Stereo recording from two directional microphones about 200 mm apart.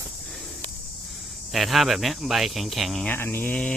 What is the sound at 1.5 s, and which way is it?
Speech, centre (ahead or behind).